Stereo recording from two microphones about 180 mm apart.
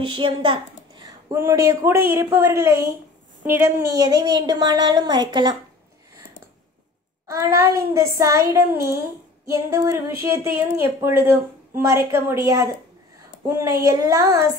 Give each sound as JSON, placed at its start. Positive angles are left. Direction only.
{"t": 0.0, "sound": "a woman's voice", "side_deg": -30}
{"t": 1.3, "sound": "a woman's voice", "side_deg": -15}
{"t": 7.2, "sound": "a woman's voice", "side_deg": -15}